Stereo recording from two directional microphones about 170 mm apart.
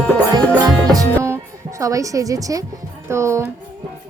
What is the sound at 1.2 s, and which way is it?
A woman's voice, 15° right (ahead or behind).